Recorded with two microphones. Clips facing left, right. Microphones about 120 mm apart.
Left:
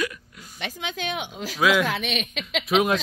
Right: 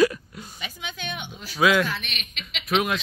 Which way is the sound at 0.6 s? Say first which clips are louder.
Left 6 dB; 90° left.